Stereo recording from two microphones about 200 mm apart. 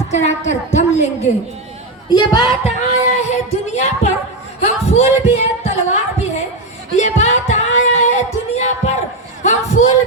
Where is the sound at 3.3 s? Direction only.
35° left (ahead or behind).